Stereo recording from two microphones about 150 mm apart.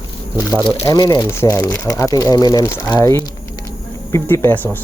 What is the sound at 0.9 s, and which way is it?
Speech, 25° left (ahead or behind).